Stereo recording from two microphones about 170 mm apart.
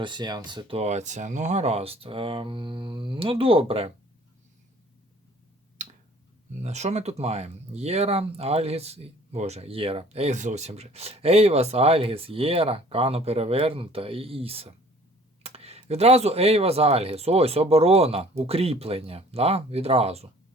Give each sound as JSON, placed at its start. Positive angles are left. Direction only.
{"t": 0.0, "sound": "speech", "side_deg": -25}
{"t": 6.5, "sound": "speech", "side_deg": -40}